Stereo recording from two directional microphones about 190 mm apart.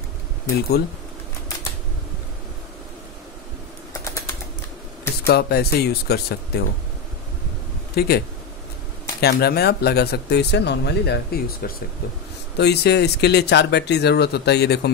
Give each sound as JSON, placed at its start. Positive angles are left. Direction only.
{"t": 3.9, "sound": "typing", "side_deg": 15}
{"t": 5.2, "sound": "speech", "side_deg": 55}
{"t": 7.9, "sound": "speech", "side_deg": 55}
{"t": 9.2, "sound": "speech", "side_deg": 55}